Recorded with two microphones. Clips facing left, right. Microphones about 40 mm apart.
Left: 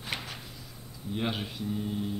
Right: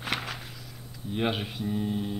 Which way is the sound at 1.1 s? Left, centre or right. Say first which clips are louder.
Right 4 dB; right.